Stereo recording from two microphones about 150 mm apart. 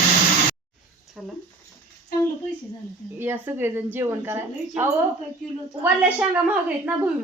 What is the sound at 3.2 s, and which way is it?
A woman's voice, 15° right (ahead or behind).